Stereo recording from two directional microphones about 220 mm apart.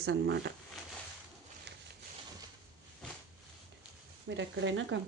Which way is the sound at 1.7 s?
50° right (ahead or behind).